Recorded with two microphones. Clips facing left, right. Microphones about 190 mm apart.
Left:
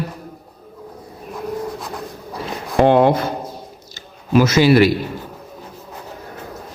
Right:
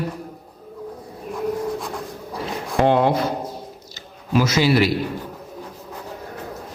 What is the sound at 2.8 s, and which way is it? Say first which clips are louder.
Speech: left 4 dB; 55° left (ahead or behind).